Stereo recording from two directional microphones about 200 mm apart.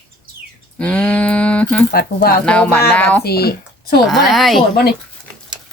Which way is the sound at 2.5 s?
5° left (ahead or behind).